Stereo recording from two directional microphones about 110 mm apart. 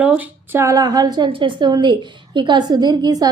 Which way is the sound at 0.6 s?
30° right (ahead or behind).